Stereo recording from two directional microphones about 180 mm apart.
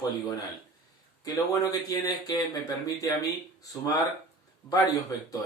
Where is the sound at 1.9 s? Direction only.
20° left (ahead or behind).